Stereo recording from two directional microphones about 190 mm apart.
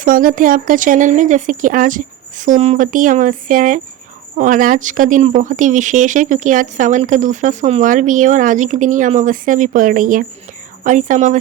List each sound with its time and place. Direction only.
0.0 s speech: 45° right (ahead or behind)